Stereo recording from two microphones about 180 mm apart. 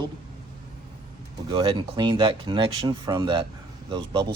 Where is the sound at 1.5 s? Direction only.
25° right (ahead or behind).